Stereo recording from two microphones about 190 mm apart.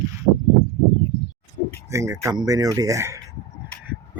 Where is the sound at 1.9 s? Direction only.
15° right (ahead or behind).